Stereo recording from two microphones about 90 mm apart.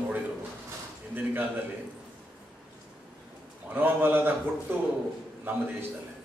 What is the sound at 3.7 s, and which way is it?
Speech, 20° right (ahead or behind).